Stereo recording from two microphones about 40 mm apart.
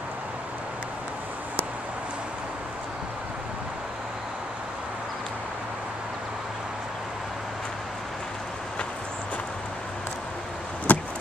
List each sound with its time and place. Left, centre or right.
10.9 s vehicle: left